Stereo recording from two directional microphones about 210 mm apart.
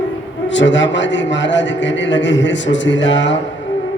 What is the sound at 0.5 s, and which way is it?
A man's voice, 60° left (ahead or behind).